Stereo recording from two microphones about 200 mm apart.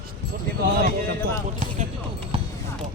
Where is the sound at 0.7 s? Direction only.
50° right (ahead or behind).